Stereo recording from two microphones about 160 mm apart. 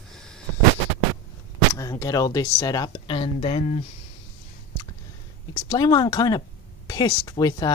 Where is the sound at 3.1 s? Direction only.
35° left (ahead or behind).